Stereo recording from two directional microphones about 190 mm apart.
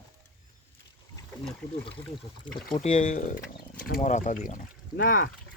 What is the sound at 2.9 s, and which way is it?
Speech, 40° left (ahead or behind).